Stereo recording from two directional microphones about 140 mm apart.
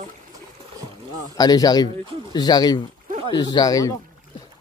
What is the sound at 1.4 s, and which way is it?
Speech, 30° left (ahead or behind).